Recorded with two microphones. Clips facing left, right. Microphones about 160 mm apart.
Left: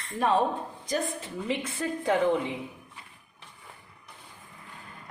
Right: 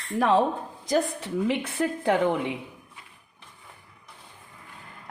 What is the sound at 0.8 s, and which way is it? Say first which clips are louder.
A woman's voice: right 6 dB; 75° right (ahead or behind).